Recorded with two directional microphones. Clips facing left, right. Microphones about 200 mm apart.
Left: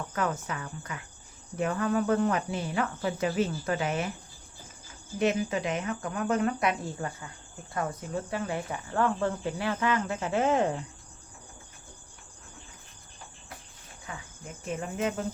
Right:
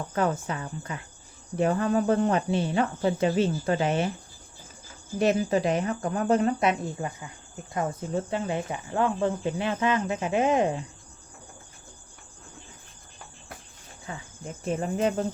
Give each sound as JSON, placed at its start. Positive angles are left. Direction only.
{"t": 0.1, "sound": "speech", "side_deg": -30}
{"t": 5.2, "sound": "speech", "side_deg": -35}
{"t": 14.1, "sound": "speech", "side_deg": -35}